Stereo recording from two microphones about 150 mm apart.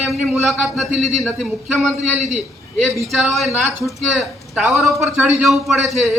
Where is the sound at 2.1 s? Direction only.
50° right (ahead or behind).